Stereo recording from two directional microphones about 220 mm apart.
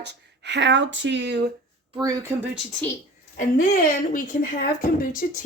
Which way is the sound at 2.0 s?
15° right (ahead or behind).